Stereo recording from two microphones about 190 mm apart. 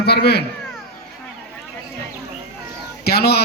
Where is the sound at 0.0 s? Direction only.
60° left (ahead or behind).